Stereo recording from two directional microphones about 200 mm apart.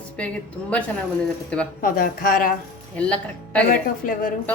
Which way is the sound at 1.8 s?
45° left (ahead or behind).